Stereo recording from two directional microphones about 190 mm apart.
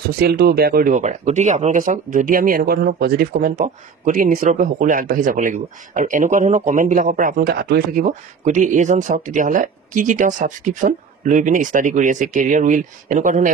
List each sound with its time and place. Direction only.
0.2 s speech: 55° right (ahead or behind)